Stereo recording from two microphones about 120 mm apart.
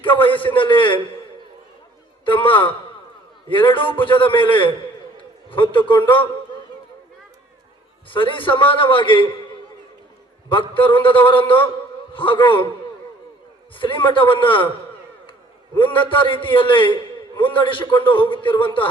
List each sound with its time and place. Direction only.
0.0 s a sound: 45° left (ahead or behind)
2.2 s a man's voice: 45° left (ahead or behind)
5.7 s a man's voice: 45° left (ahead or behind)
8.1 s a man's voice: 45° left (ahead or behind)
10.5 s a man's voice: 45° left (ahead or behind)
13.7 s a man's voice: 45° left (ahead or behind)
15.8 s a man's voice: 45° left (ahead or behind)